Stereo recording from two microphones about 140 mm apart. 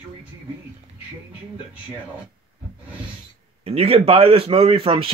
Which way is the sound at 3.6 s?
45° right (ahead or behind).